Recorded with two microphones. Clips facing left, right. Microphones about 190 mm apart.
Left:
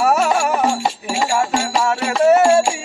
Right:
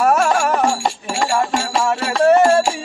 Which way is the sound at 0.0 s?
10° left (ahead or behind).